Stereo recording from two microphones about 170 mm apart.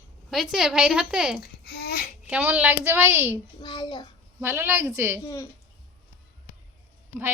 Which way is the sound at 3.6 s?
25° left (ahead or behind).